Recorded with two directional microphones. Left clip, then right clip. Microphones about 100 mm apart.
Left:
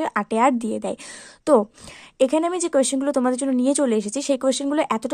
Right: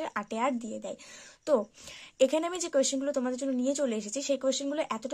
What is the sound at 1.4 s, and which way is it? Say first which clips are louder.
Speech: left 10 dB; 55° left (ahead or behind).